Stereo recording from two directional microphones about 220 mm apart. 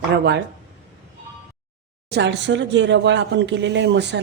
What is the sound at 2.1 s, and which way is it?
Speech, 50° right (ahead or behind).